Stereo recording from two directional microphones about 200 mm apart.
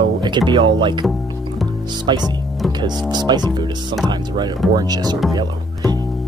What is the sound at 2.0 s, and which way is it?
Speech, 20° right (ahead or behind).